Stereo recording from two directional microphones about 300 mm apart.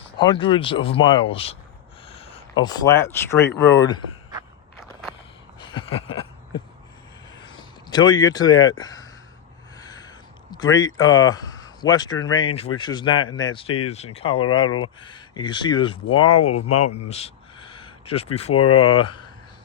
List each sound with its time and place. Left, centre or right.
0.2 s speech: centre
5.5 s a sound: centre
7.9 s speech: centre
9.7 s a sound: centre
12.1 s speech: left
12.8 s speech: centre
16.3 s speech: left
16.6 s speech: left
17.1 s a sound: left
18.5 s speech: left